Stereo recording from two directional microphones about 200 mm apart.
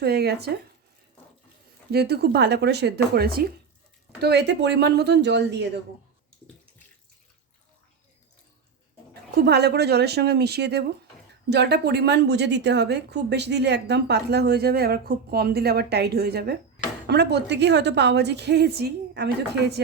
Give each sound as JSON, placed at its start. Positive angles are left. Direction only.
{"t": 0.0, "sound": "speech", "side_deg": -55}
{"t": 1.9, "sound": "a woman's voice", "side_deg": -50}
{"t": 9.4, "sound": "a woman's voice", "side_deg": -55}